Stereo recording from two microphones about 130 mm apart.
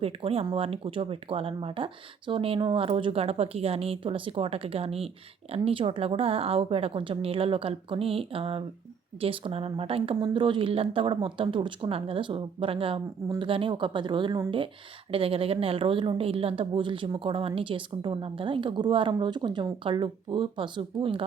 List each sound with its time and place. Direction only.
0.0 s a woman's voice: 50° right (ahead or behind)